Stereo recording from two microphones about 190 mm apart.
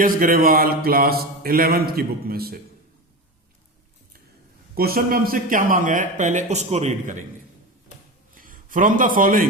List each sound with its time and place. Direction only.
0.0 s mantra: 50° right (ahead or behind)
4.7 s mantra: 50° right (ahead or behind)
8.4 s a man's voice: 45° right (ahead or behind)